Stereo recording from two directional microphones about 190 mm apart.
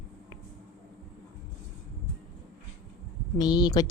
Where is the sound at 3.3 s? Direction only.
20° left (ahead or behind).